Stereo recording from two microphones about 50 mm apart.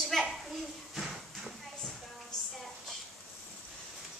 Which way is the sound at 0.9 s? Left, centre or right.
Centre.